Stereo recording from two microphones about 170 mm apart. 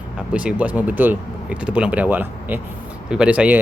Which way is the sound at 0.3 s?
5° right (ahead or behind).